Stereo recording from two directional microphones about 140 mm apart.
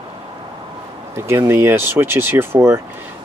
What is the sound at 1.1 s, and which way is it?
Speech, 20° right (ahead or behind).